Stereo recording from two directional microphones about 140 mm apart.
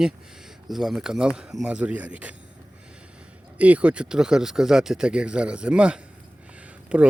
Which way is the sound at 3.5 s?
10° right (ahead or behind).